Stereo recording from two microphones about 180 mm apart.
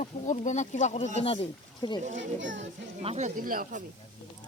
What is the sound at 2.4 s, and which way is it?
Child singing, 90° right.